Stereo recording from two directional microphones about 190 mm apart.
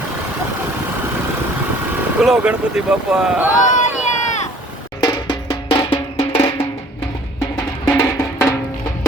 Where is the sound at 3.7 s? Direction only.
40° left (ahead or behind).